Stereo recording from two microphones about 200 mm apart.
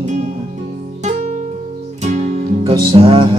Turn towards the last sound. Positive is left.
turn(degrees=-30)  # may be behind; listen again after turning